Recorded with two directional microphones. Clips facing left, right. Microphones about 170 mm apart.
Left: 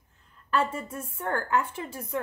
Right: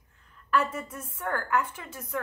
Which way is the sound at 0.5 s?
30° left (ahead or behind).